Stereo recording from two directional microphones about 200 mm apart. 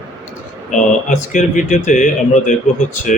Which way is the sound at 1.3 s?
40° left (ahead or behind).